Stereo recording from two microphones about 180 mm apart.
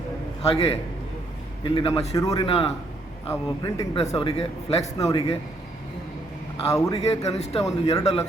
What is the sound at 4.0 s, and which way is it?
A man's voice, 35° left (ahead or behind).